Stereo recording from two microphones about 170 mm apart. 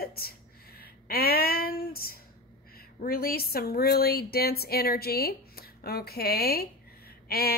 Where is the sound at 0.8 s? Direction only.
65° left (ahead or behind).